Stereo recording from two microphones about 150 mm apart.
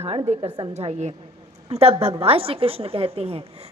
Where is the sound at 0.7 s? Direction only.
45° right (ahead or behind).